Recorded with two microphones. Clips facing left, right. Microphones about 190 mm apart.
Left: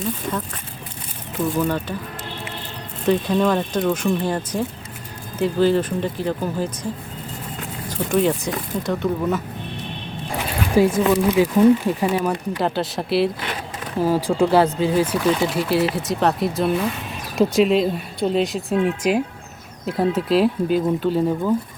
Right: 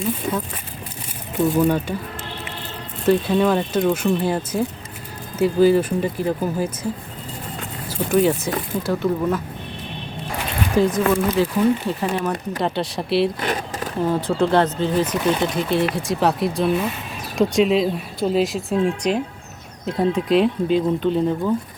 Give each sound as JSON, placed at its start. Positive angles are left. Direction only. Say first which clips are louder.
{"t": 0.0, "sound": "speech", "louder": "right 2 dB", "side_deg": -10}
{"t": 1.5, "sound": "speech", "louder": "right 4 dB", "side_deg": -15}
{"t": 3.1, "sound": "speech", "louder": "right 1 dB", "side_deg": -5}
{"t": 7.9, "sound": "speech", "louder": "right 1 dB", "side_deg": -5}
{"t": 10.9, "sound": "speech", "louder": "left 2 dB", "side_deg": 15}
{"t": 13.4, "sound": "a sound", "louder": "right 5 dB", "side_deg": -45}
{"t": 14.0, "sound": "speech", "louder": "left 2 dB", "side_deg": 10}